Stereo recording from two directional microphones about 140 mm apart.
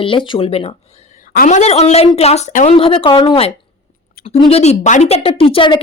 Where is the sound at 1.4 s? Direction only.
60° left (ahead or behind).